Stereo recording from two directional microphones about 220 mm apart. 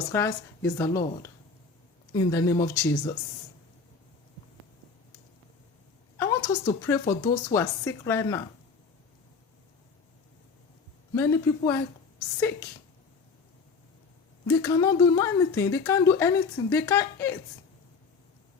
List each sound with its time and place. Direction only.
0.1 s speech: 15° left (ahead or behind)
6.1 s speech: 15° left (ahead or behind)
11.1 s speech: 10° left (ahead or behind)
14.4 s speech: 15° left (ahead or behind)